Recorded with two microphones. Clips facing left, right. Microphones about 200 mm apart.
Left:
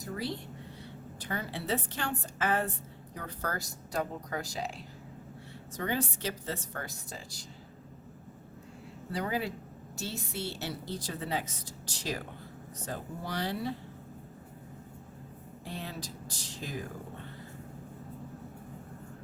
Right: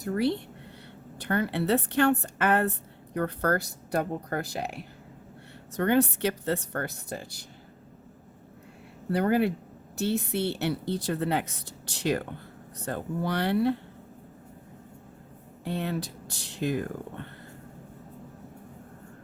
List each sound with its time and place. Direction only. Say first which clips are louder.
0.0 s a woman's voice: right 10 dB; 65° right (ahead or behind)
9.1 s a woman's voice: right 9 dB; 60° right (ahead or behind)
15.6 s a woman's voice: right 10 dB; 65° right (ahead or behind)